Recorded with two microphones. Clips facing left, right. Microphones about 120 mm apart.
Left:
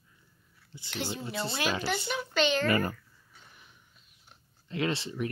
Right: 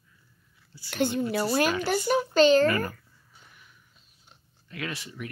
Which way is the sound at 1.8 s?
40° right (ahead or behind).